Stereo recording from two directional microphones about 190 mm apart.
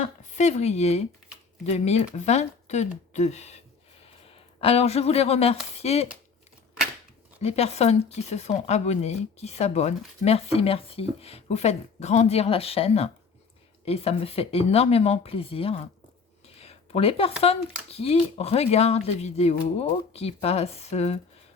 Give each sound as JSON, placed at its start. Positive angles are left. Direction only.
{"t": 0.3, "sound": "speech", "side_deg": 35}
{"t": 4.6, "sound": "speech", "side_deg": 30}
{"t": 7.4, "sound": "speech", "side_deg": 35}
{"t": 16.6, "sound": "a sound", "side_deg": 30}
{"t": 17.4, "sound": "speech", "side_deg": 30}